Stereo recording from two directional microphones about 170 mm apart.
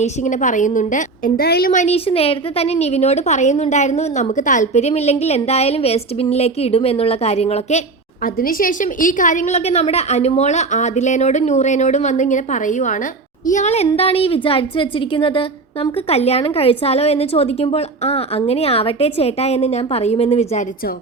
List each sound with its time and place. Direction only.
0.0 s a woman's voice: 45° left (ahead or behind); by 1.7 s 65° left (ahead or behind)
1.7 s a woman's voice: 40° left (ahead or behind)
8.2 s a woman's voice: 55° left (ahead or behind); by 20.7 s 40° left (ahead or behind)